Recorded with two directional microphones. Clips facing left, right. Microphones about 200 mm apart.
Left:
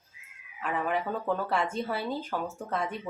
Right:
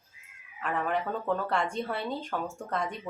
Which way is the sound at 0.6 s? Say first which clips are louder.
Even; 5° left (ahead or behind).